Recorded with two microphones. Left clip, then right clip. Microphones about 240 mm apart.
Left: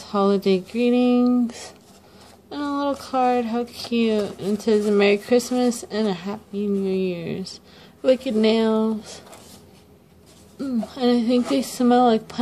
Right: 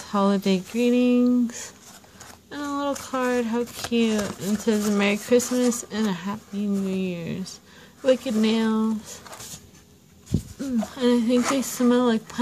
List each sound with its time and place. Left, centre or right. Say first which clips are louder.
0.0 s speech: left 3 dB; right
11.0 s speech: left 1 dB; right